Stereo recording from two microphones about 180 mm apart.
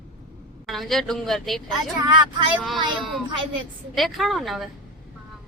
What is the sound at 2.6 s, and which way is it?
A woman's voice, centre (ahead or behind).